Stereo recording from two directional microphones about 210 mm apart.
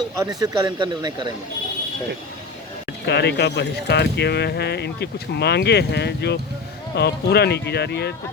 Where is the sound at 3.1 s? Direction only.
55° left (ahead or behind).